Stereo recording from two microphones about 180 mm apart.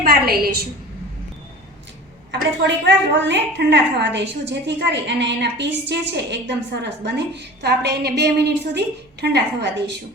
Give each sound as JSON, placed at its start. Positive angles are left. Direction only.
{"t": 0.0, "sound": "a woman's voice", "side_deg": -60}
{"t": 2.6, "sound": "a woman's voice", "side_deg": -80}